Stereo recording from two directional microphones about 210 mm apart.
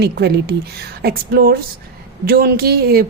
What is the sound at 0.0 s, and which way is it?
A woman's voice, 50° right (ahead or behind).